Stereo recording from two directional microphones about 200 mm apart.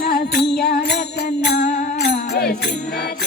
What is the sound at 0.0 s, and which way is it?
Music, 50° left (ahead or behind).